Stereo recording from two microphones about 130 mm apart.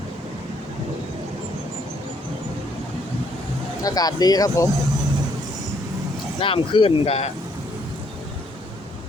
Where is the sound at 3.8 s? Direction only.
30° left (ahead or behind).